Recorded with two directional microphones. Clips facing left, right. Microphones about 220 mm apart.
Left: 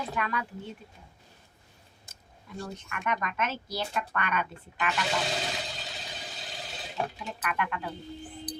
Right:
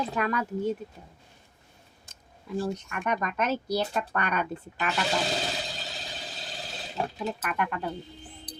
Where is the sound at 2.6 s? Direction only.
35° right (ahead or behind).